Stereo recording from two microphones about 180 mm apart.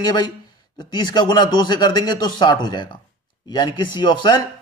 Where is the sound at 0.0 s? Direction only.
25° left (ahead or behind).